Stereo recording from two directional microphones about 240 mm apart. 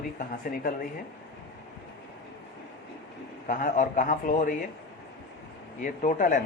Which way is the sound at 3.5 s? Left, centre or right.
Left.